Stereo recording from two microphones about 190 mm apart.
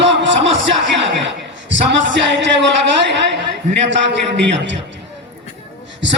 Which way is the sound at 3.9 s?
70° right (ahead or behind).